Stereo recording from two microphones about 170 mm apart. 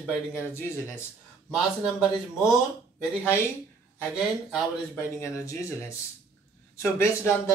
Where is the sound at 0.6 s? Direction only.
15° left (ahead or behind).